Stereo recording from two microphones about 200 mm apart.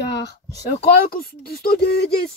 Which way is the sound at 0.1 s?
60° left (ahead or behind).